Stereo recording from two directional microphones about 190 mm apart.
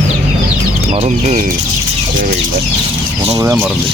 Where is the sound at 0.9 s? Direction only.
35° right (ahead or behind).